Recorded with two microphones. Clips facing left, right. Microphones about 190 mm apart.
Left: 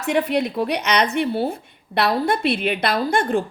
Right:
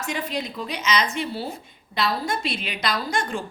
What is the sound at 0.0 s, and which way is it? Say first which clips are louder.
A woman's voice: left 9 dB; 65° left (ahead or behind).